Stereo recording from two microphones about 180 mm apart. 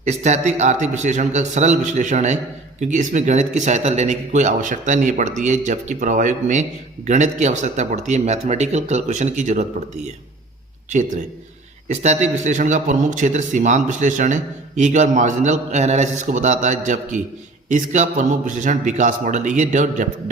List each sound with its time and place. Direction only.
0.0 s a man's voice: 40° right (ahead or behind)
11.9 s a man's voice: 40° right (ahead or behind)